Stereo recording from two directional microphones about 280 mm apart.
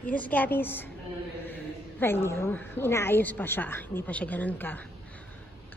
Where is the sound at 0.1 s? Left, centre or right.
Centre.